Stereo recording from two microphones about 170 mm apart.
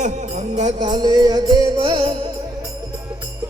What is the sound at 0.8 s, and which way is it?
Music, 25° right (ahead or behind).